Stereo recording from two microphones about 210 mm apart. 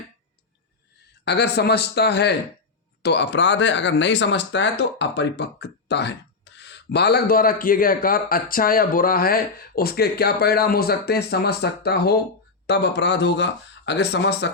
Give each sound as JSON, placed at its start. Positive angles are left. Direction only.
{"t": 1.2, "sound": "speech", "side_deg": 50}